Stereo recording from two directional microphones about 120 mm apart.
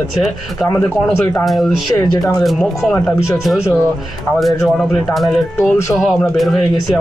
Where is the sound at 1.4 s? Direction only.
Centre (ahead or behind).